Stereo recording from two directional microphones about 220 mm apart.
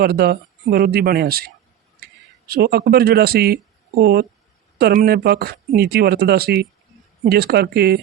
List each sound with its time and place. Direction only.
0.0 s speech: 45° right (ahead or behind)
2.5 s speech: 45° right (ahead or behind)